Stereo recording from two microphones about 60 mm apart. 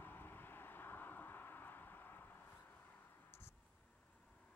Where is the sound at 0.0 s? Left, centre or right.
Left.